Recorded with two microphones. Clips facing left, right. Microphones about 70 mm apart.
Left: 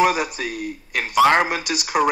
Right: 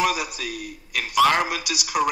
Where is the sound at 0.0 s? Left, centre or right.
Left.